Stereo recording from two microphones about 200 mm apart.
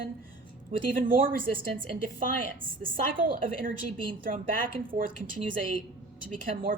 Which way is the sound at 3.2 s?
45° right (ahead or behind).